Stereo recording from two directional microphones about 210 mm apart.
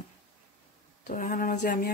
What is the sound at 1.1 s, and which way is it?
Speech, 40° left (ahead or behind).